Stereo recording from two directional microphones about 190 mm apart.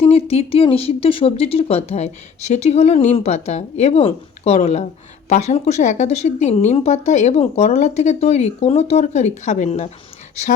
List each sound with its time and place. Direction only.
0.0 s speech: 30° left (ahead or behind)